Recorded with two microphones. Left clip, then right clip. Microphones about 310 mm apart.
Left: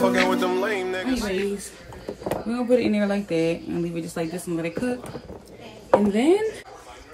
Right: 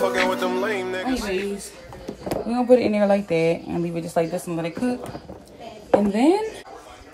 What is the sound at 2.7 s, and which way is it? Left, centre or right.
Speech, right.